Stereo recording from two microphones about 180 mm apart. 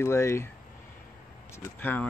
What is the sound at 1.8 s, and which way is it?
Speech, 10° left (ahead or behind).